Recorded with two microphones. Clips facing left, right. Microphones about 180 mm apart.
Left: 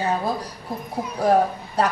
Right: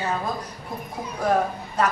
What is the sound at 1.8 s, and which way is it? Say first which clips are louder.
Speech: left 1 dB; 35° left (ahead or behind).